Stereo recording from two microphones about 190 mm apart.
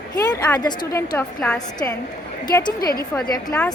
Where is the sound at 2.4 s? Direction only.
20° left (ahead or behind).